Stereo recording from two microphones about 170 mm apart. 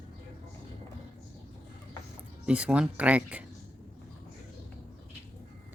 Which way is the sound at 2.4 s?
5° right (ahead or behind).